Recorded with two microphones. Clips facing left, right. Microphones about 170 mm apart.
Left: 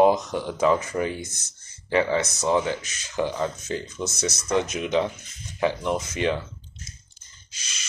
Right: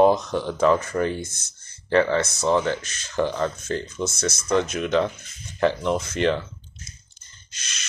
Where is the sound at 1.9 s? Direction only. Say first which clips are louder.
Right 2 dB; 15° left (ahead or behind).